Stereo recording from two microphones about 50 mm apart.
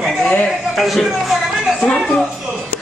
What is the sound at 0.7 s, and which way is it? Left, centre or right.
Speech, centre.